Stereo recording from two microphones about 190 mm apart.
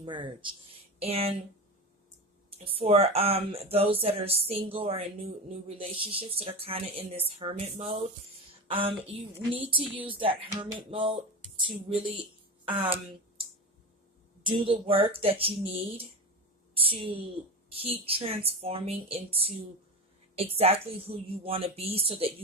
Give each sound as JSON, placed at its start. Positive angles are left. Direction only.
{"t": 0.0, "sound": "a woman's voice", "side_deg": -25}
{"t": 2.6, "sound": "a woman's voice", "side_deg": -30}
{"t": 14.4, "sound": "a woman's voice", "side_deg": -30}